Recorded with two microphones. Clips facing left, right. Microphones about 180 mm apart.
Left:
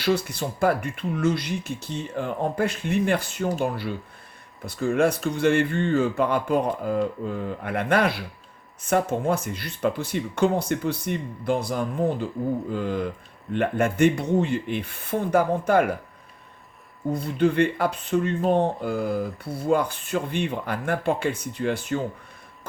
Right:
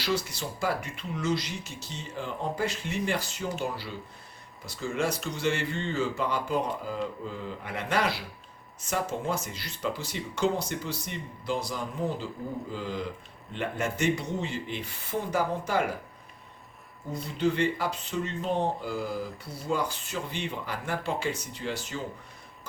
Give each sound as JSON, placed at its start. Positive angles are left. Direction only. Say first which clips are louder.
{"t": 0.0, "sound": "speech", "louder": "left 6 dB", "side_deg": 55}
{"t": 17.1, "sound": "speech", "louder": "left 6 dB", "side_deg": 55}